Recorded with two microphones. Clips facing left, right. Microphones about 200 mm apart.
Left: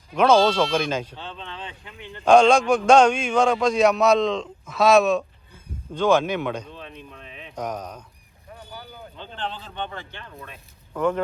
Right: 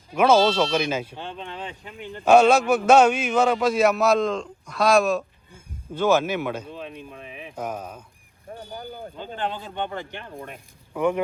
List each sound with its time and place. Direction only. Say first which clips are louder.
0.2 s a man's voice: even; 5° right (ahead or behind)
8.7 s vehicle: right 5 dB; 35° right (ahead or behind)
9.2 s speech: right 3 dB; 10° right (ahead or behind)
10.3 s speech: right 5 dB; 50° right (ahead or behind)
10.9 s speech: even; 10° right (ahead or behind)